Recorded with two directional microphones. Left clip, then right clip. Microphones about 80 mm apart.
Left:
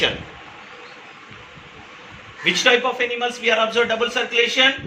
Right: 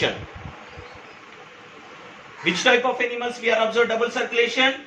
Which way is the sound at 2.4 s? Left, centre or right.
Right.